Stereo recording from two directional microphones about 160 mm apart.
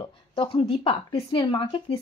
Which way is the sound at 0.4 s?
35° left (ahead or behind).